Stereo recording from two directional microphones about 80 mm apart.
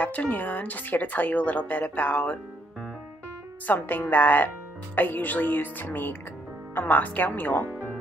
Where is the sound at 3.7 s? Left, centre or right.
Left.